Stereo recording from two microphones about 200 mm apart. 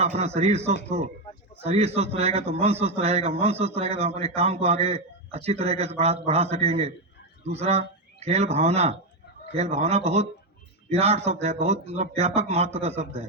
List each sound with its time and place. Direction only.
0.0 s a man's voice: 30° right (ahead or behind)